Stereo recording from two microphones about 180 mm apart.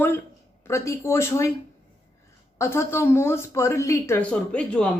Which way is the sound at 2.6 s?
15° left (ahead or behind).